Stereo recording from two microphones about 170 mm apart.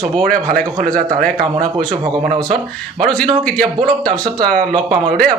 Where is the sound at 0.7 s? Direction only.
55° right (ahead or behind).